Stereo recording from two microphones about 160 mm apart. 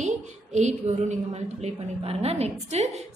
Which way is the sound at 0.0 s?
45° right (ahead or behind).